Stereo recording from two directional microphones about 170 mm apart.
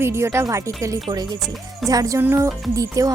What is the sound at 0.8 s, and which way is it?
Music, 20° right (ahead or behind).